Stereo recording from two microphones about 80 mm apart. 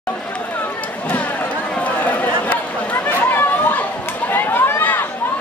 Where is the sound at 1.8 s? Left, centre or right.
Centre.